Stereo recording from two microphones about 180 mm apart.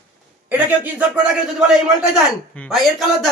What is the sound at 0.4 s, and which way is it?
A man's voice, 10° right (ahead or behind).